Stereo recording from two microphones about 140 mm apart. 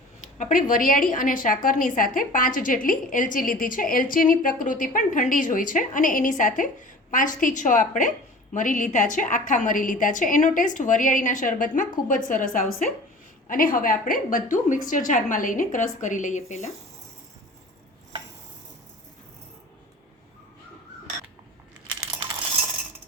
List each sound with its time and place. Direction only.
0.3 s a woman's voice: 65° left (ahead or behind)